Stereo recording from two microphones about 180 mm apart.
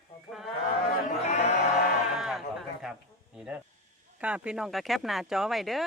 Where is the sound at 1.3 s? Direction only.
40° left (ahead or behind).